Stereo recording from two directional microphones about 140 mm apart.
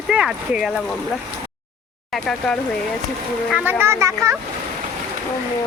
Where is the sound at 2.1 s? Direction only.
5° left (ahead or behind).